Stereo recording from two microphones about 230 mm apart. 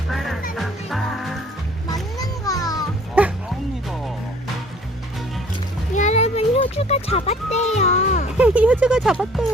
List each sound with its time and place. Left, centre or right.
0.1 s music: centre
1.9 s music: centre
5.9 s music: left
8.4 s speech: centre